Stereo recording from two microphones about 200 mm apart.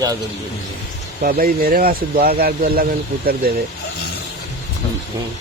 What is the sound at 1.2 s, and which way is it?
Speech, 50° right (ahead or behind).